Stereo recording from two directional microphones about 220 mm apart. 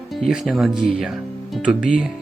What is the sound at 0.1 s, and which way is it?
Speech, centre (ahead or behind).